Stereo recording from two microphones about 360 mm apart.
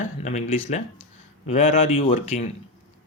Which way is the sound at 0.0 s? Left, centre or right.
Centre.